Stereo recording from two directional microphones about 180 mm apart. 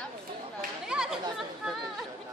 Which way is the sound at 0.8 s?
5° right (ahead or behind).